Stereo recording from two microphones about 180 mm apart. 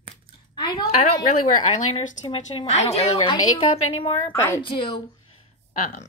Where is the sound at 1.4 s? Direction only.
45° left (ahead or behind).